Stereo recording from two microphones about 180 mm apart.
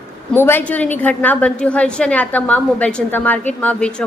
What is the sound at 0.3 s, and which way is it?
A woman's voice, 10° left (ahead or behind).